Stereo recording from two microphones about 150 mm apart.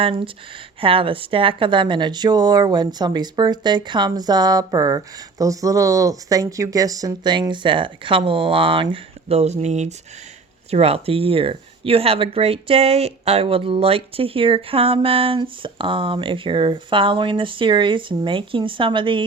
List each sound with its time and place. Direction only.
0.8 s a woman's voice: 35° right (ahead or behind)